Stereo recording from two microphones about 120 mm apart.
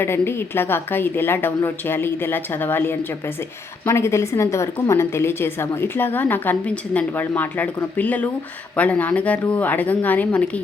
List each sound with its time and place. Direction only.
0.0 s a woman's voice: 20° left (ahead or behind)